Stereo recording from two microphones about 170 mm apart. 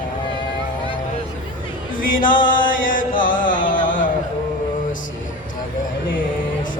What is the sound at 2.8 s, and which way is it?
Chant, 55° left (ahead or behind).